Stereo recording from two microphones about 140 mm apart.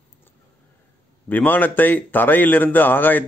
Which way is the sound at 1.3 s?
15° left (ahead or behind).